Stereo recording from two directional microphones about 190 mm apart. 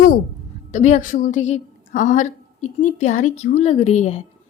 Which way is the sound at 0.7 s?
40° left (ahead or behind).